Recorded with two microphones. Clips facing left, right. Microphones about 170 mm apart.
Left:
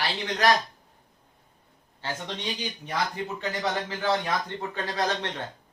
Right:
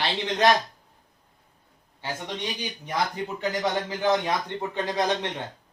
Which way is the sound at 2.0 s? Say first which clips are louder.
Right 1 dB; 15° right (ahead or behind).